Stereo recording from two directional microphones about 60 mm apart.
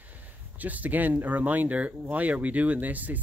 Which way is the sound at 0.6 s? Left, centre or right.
Right.